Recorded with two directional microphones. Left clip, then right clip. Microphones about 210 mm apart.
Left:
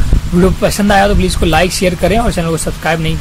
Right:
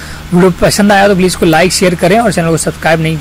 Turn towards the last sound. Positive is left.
turn(degrees=-15)  # may be behind; listen again after turning